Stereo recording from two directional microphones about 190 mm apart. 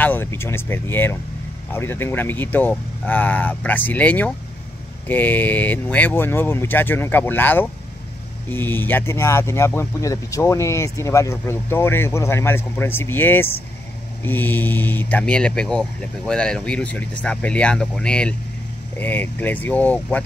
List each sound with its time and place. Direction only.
0.0 s speech: 10° left (ahead or behind)